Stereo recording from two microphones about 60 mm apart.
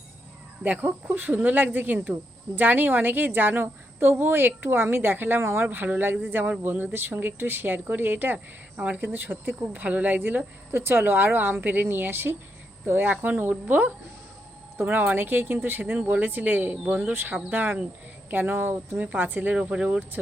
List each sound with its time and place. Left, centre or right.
0.6 s speech: right
5.6 s speech: right
17.0 s speech: right
19.5 s speech: centre